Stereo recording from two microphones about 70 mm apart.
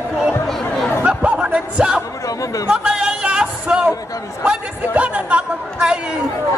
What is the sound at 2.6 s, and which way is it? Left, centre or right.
Chatter, centre.